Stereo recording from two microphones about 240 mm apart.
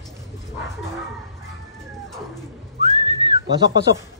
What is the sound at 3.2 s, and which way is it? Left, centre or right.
Whistling, centre.